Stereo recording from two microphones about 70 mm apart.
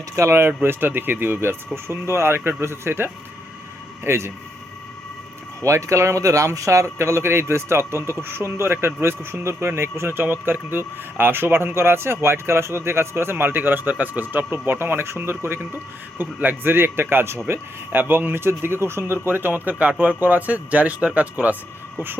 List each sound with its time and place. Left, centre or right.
0.2 s speech: right
5.6 s speech: right; by 21.5 s centre
21.9 s a sound: right